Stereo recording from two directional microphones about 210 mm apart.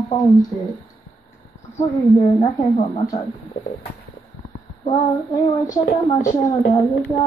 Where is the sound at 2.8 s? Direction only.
30° left (ahead or behind).